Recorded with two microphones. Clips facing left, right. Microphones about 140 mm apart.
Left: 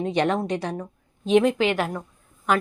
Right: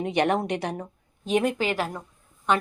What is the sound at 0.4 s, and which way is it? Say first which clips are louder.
Speech: left 1 dB; 65° right (ahead or behind).